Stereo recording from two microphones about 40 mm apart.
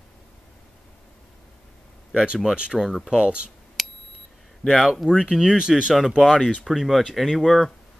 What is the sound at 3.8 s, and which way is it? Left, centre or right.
Beep, centre.